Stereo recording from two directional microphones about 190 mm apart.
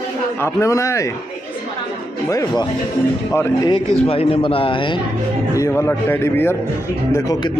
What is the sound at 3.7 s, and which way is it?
Speech, 30° left (ahead or behind).